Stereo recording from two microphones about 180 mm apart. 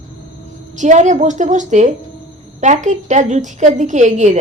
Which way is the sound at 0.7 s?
40° right (ahead or behind).